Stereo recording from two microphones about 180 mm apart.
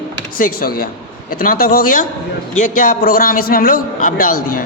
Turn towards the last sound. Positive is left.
turn(degrees=55)  # may be behind; listen again after turning